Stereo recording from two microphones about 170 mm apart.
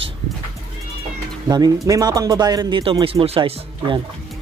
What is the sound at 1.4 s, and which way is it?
Speech, 25° right (ahead or behind).